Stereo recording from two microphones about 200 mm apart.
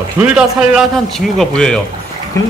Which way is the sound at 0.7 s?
Centre (ahead or behind).